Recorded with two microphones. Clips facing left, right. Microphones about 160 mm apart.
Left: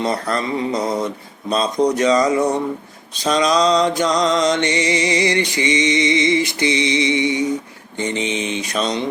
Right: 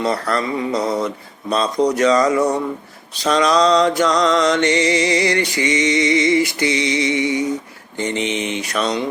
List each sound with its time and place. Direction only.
0.0 s mantra: 20° left (ahead or behind)